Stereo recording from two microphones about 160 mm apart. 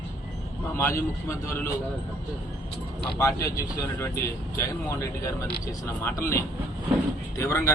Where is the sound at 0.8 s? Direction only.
15° left (ahead or behind).